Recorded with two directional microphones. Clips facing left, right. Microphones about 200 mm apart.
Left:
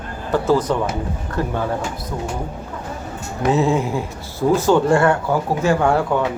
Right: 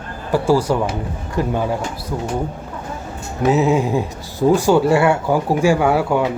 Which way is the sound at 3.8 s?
15° right (ahead or behind).